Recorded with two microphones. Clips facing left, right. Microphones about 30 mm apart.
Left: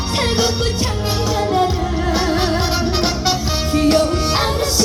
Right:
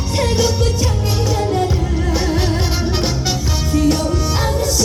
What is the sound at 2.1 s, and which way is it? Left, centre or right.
Music, left.